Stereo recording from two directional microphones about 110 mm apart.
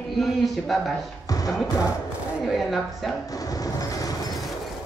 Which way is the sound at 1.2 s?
35° left (ahead or behind).